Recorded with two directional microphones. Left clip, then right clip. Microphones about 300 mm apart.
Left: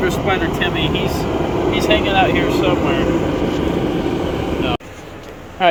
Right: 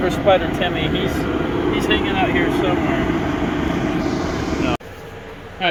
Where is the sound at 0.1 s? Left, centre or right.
Left.